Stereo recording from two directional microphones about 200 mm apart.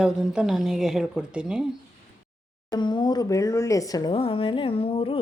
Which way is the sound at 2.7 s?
20° left (ahead or behind).